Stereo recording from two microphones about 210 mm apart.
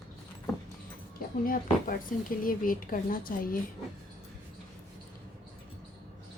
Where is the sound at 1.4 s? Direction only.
40° left (ahead or behind).